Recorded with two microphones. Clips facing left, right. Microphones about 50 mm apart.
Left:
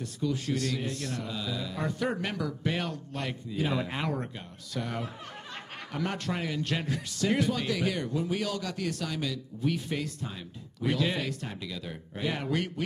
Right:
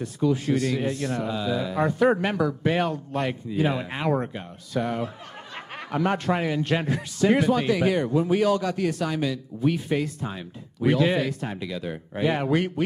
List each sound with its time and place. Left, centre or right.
0.0 s a man's voice: centre